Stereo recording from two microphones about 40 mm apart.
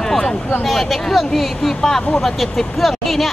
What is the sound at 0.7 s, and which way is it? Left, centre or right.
Speech, centre.